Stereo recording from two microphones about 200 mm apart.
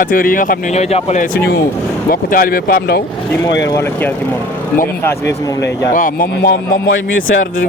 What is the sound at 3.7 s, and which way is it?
Speech, 15° left (ahead or behind).